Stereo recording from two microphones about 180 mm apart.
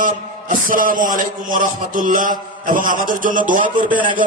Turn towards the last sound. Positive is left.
turn(degrees=-25)  # may be behind; listen again after turning